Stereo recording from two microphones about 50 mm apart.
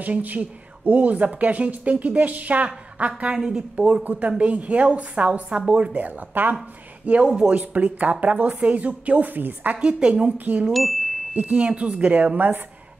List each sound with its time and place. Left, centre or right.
0.0 s speech: right
3.3 s speech: centre; by 6.5 s right
7.2 s speech: centre
7.5 s speech: right
9.8 s speech: centre
10.3 s speech: right
10.7 s speech: centre
11.3 s speech: right
11.6 s speech: right